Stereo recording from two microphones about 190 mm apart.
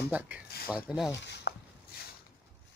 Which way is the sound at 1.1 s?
65° left (ahead or behind).